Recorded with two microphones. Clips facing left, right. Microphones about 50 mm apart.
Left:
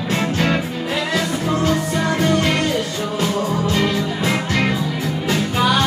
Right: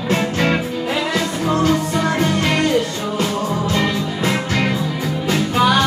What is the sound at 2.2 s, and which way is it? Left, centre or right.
Music, centre.